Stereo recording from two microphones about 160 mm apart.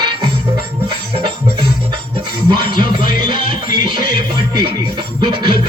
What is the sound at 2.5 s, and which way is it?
Music, 30° right (ahead or behind).